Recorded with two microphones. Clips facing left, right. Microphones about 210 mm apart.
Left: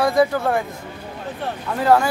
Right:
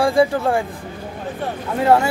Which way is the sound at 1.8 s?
25° right (ahead or behind).